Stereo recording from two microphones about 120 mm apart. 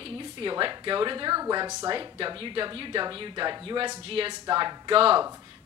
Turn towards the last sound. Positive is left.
turn(degrees=-50)  # may be behind; listen again after turning